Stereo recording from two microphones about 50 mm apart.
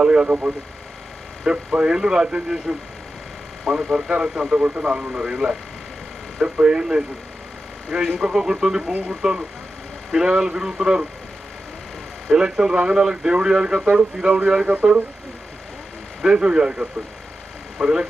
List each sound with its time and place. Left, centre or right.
0.0 s speech: right
3.9 s speech: centre
8.9 s speech: right
10.1 s speech: centre
12.3 s speech: centre
16.2 s speech: centre